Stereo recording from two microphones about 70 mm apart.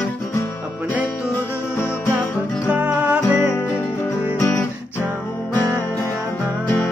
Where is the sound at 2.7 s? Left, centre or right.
Right.